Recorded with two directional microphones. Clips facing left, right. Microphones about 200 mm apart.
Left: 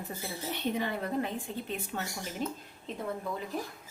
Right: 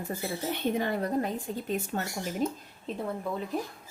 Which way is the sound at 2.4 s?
40° right (ahead or behind).